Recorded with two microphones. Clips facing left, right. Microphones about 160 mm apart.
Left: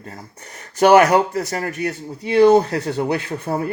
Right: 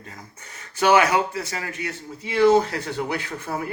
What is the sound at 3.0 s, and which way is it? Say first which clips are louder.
Speech: left 6 dB; 30° left (ahead or behind).